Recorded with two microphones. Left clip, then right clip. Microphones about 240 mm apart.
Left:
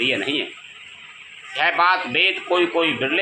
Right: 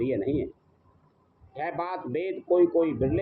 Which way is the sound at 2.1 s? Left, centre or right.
Left.